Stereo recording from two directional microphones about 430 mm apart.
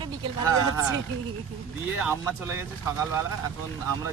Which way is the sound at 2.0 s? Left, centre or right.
Centre.